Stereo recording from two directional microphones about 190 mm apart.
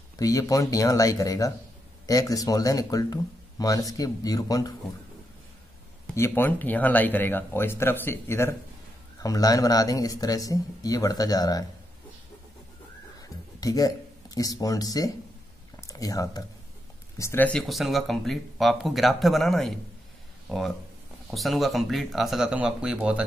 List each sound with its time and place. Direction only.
0.2 s speech: 20° left (ahead or behind)
6.1 s speech: 15° left (ahead or behind)
13.6 s speech: 20° left (ahead or behind); by 23.2 s 5° right (ahead or behind)